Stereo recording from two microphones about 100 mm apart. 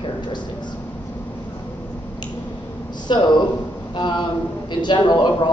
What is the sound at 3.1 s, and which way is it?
Speech, 50° left (ahead or behind).